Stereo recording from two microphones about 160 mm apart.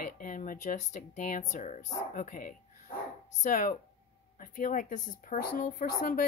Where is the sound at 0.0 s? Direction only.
55° left (ahead or behind).